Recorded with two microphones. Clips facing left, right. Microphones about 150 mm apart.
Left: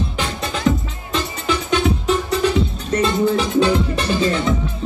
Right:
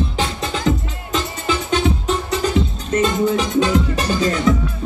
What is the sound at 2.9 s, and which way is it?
Music, 30° left (ahead or behind).